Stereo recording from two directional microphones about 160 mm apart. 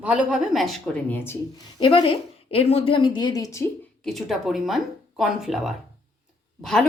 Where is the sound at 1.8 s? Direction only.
35° left (ahead or behind).